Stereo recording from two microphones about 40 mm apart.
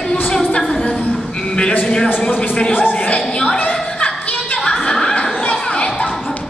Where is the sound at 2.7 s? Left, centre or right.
Left.